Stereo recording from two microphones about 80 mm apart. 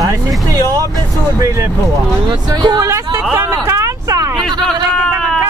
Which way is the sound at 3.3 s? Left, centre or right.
Right.